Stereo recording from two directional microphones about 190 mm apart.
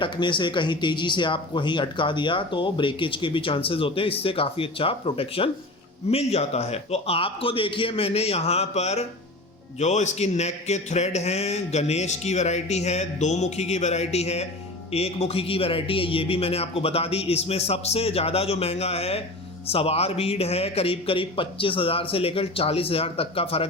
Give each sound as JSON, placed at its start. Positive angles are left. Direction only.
{"t": 0.0, "sound": "a man's voice", "side_deg": 25}